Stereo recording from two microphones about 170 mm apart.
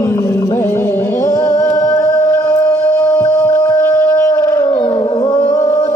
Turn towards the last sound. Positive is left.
turn(degrees=20)  # may be behind; listen again after turning